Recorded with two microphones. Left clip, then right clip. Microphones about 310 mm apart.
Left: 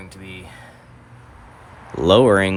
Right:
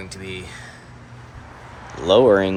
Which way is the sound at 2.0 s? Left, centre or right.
Left.